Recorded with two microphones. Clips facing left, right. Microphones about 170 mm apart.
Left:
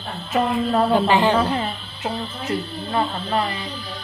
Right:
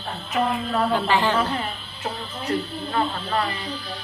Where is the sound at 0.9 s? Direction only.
20° left (ahead or behind).